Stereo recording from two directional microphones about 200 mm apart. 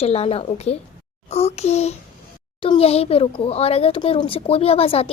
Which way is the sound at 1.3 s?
30° left (ahead or behind).